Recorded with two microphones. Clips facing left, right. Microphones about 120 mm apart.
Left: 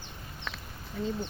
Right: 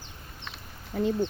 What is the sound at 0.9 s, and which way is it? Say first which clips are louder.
Speech: right 7 dB; 60° right (ahead or behind).